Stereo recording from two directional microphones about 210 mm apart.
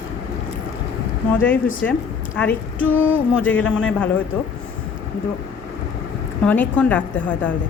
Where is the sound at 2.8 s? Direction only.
70° left (ahead or behind).